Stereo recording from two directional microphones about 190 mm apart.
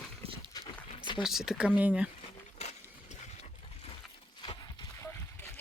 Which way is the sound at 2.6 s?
35° left (ahead or behind).